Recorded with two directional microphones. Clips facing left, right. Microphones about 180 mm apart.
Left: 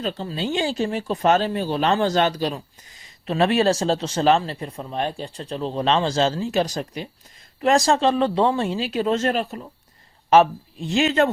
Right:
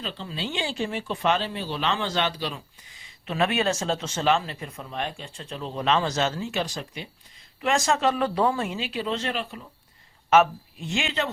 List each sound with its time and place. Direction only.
0.0 s speech: 45° left (ahead or behind)
8.9 s speech: 45° left (ahead or behind)
10.2 s a man's voice: 35° left (ahead or behind)